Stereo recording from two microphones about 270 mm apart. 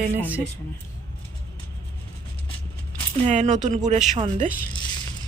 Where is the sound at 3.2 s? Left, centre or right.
Right.